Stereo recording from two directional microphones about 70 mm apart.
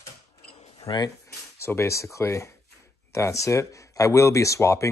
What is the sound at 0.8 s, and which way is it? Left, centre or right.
Speech, left.